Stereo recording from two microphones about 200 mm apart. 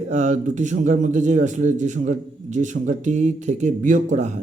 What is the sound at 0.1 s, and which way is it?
A man's voice, 35° right (ahead or behind).